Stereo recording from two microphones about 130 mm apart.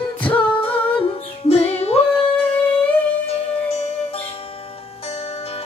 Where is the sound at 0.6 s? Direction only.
45° left (ahead or behind).